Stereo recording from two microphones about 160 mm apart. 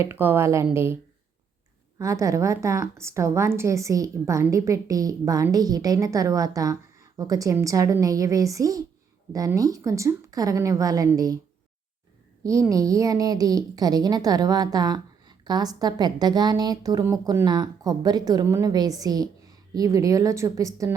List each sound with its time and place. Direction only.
0.0 s a woman's voice: 15° right (ahead or behind)
2.0 s a woman's voice: 20° right (ahead or behind)
12.4 s a woman's voice: 20° right (ahead or behind)